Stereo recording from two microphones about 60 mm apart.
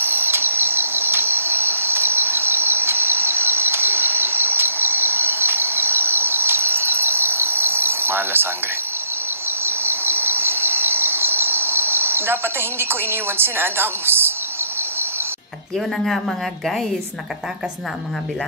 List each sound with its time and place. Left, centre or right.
0.0 s cricket: right
9.7 s cricket: right